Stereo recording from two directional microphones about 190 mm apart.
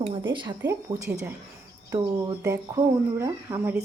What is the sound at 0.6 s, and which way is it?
Speech, 10° right (ahead or behind).